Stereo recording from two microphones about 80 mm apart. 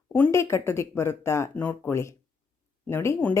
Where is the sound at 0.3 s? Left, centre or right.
Left.